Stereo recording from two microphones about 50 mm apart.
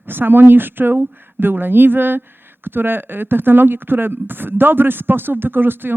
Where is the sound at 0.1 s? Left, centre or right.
Right.